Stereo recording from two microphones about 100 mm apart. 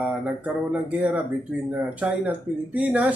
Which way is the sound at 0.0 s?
15° right (ahead or behind).